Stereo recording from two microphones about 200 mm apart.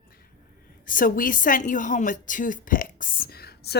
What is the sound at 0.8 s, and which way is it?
A woman's voice, 45° left (ahead or behind).